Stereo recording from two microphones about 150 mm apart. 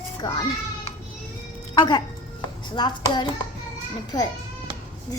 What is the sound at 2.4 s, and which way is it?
Speech, 30° left (ahead or behind).